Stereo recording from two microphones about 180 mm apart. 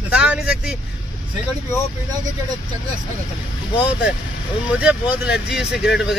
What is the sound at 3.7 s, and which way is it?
Speech, 5° right (ahead or behind).